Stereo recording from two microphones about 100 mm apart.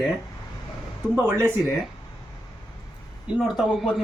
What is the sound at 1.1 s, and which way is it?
Speech, 20° right (ahead or behind).